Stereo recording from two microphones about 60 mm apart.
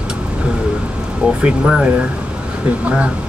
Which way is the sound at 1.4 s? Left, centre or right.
Centre.